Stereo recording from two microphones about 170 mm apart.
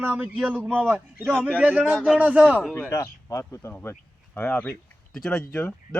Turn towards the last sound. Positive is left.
turn(degrees=10)  # may be behind; listen again after turning